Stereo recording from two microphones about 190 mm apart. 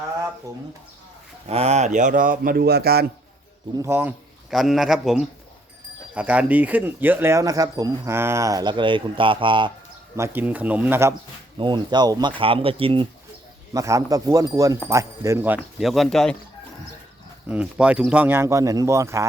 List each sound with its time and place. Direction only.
1.5 s speech: 35° right (ahead or behind); by 3.1 s 55° right (ahead or behind)
3.8 s a man's voice: 10° right (ahead or behind)
10.2 s speech: 10° right (ahead or behind)
11.6 s speech: 25° right (ahead or behind)
13.7 s speech: 15° right (ahead or behind); by 16.3 s 5° left (ahead or behind)
17.5 s a man's voice: 5° right (ahead or behind)